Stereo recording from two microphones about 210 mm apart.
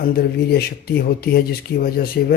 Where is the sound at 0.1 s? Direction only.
45° left (ahead or behind).